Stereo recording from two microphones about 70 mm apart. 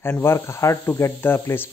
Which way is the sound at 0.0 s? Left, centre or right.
Left.